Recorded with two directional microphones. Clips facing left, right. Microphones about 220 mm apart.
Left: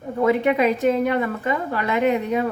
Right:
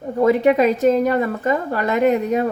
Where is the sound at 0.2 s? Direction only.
40° right (ahead or behind).